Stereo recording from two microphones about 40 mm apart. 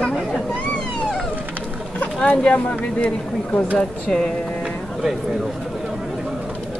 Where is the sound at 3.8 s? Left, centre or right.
Centre.